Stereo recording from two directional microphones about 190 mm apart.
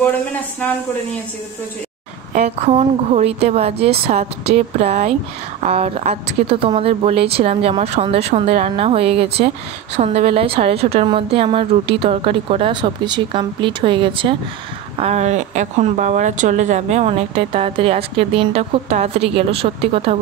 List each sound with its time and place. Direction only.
2.6 s a woman's voice: 35° right (ahead or behind)